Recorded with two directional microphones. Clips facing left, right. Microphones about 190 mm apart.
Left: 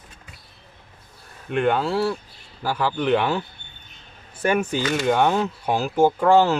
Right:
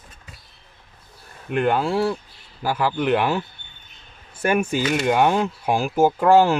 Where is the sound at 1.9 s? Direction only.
20° right (ahead or behind).